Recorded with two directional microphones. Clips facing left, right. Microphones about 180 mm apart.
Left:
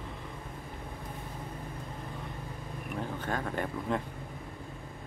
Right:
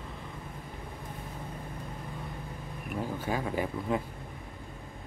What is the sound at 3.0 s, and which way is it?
Speech, 10° right (ahead or behind).